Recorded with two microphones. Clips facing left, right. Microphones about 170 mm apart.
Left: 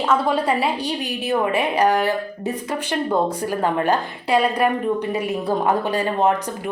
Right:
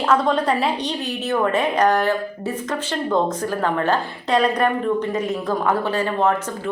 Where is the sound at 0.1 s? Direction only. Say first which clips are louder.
Right 1 dB; 5° left (ahead or behind).